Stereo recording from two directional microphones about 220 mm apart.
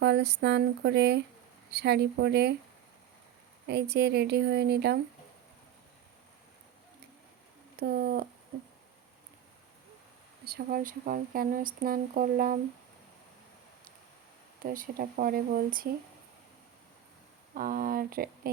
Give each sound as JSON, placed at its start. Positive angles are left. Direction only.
{"t": 0.0, "sound": "speech", "side_deg": -50}
{"t": 3.7, "sound": "speech", "side_deg": -50}
{"t": 7.8, "sound": "speech", "side_deg": -45}
{"t": 10.4, "sound": "speech", "side_deg": -40}
{"t": 14.6, "sound": "speech", "side_deg": -40}
{"t": 17.5, "sound": "speech", "side_deg": -40}